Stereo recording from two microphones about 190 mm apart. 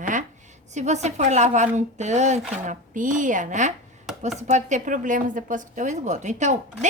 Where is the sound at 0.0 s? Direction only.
40° right (ahead or behind).